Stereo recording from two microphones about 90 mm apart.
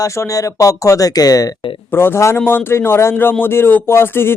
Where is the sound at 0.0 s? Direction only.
40° left (ahead or behind).